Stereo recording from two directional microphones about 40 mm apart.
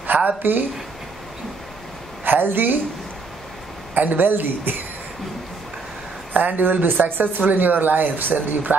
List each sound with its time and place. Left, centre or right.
0.0 s a sound: right
0.4 s speech: right
2.2 s speech: right
3.9 s speech: right
6.3 s speech: right